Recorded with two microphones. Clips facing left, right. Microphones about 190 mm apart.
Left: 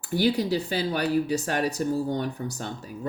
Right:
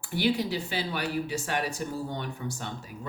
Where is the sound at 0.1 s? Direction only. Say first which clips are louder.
Left 4 dB; 40° left (ahead or behind).